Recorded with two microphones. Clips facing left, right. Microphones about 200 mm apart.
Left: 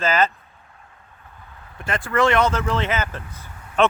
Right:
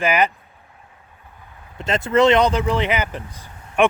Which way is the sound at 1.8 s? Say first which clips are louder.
Right 5 dB; 20° right (ahead or behind).